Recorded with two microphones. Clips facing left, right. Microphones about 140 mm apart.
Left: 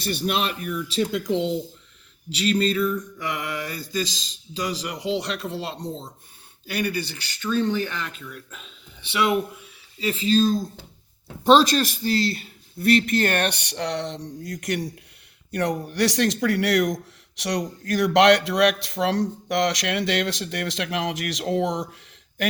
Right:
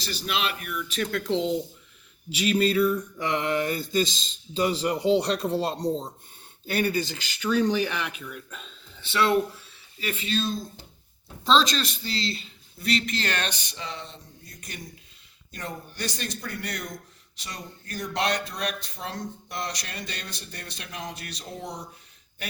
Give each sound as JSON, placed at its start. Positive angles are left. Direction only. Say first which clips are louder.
{"t": 0.0, "sound": "a man's voice", "louder": "left 5 dB", "side_deg": 55}
{"t": 1.0, "sound": "speech", "louder": "left 3 dB", "side_deg": 15}
{"t": 1.3, "sound": "speech", "louder": "left 2 dB", "side_deg": 0}
{"t": 3.2, "sound": "mantra", "louder": "right 4 dB", "side_deg": -25}
{"t": 4.5, "sound": "speech", "louder": "right 4 dB", "side_deg": -30}
{"t": 7.4, "sound": "speech", "louder": "even", "side_deg": -15}
{"t": 9.0, "sound": "speech", "louder": "left 1 dB", "side_deg": 15}
{"t": 10.0, "sound": "speech", "louder": "left 8 dB", "side_deg": 30}
{"t": 11.7, "sound": "speech", "louder": "left 8 dB", "side_deg": 50}
{"t": 15.5, "sound": "speech", "louder": "left 12 dB", "side_deg": 75}